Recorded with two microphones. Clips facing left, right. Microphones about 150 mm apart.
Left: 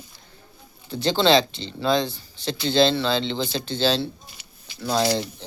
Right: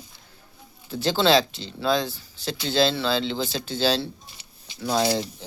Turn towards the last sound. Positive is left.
turn(degrees=-5)  # may be behind; listen again after turning